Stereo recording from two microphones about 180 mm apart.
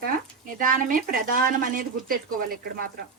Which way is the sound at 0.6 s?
50° right (ahead or behind).